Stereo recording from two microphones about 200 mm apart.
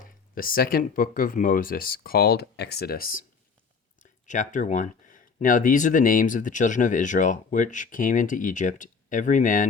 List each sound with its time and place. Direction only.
0.0 s speech: 45° left (ahead or behind)
4.3 s speech: 40° left (ahead or behind)